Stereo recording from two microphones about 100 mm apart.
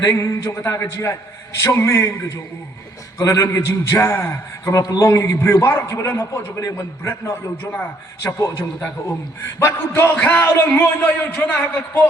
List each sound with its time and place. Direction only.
0.0 s a man's voice: 30° left (ahead or behind)
3.2 s a man's voice: 35° left (ahead or behind)
7.5 s a man's voice: 20° left (ahead or behind)